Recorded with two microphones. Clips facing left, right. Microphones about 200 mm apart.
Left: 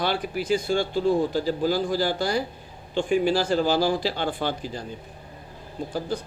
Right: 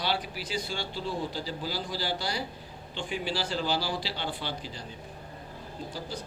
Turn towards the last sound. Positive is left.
turn(degrees=50)  # may be behind; listen again after turning